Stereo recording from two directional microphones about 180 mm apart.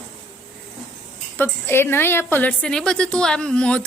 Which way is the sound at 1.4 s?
15° left (ahead or behind).